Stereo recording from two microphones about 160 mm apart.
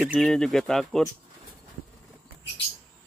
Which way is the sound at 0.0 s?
5° right (ahead or behind).